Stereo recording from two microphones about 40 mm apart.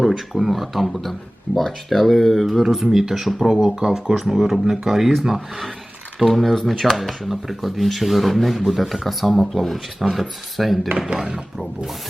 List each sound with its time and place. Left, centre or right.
0.3 s speech: centre
2.6 s speech: centre
4.9 s speech: centre
11.1 s speech: right